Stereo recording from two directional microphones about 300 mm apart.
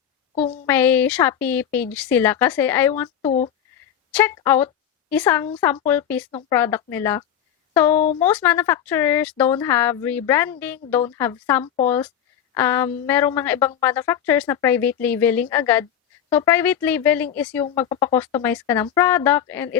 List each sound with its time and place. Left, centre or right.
0.4 s speech: centre
0.7 s a woman's voice: centre